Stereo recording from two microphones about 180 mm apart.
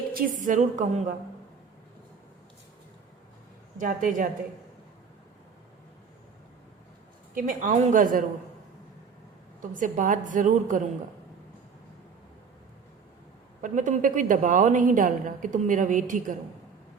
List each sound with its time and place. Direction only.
0.1 s a woman's voice: 50° right (ahead or behind)
3.8 s a woman's voice: 50° right (ahead or behind)
7.3 s a woman's voice: 45° right (ahead or behind)
9.6 s a woman's voice: 45° right (ahead or behind)
13.6 s a woman's voice: 45° right (ahead or behind)